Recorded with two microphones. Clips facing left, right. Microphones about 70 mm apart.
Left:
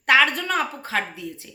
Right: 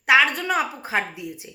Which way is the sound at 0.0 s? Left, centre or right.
Centre.